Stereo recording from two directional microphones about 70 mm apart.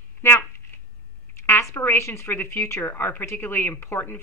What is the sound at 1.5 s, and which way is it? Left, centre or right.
Speech, left.